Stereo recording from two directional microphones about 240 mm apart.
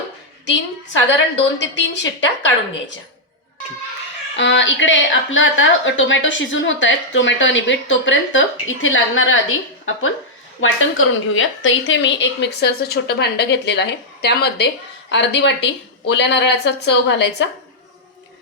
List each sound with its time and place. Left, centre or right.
1.5 s a woman's voice: left
4.4 s a woman's voice: left